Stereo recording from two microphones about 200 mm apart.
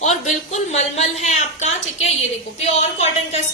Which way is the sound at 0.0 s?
35° left (ahead or behind).